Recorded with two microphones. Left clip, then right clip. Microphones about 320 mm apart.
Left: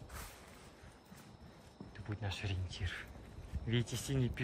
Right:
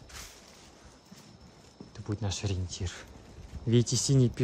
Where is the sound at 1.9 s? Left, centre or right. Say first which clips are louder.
Right 8 dB; centre.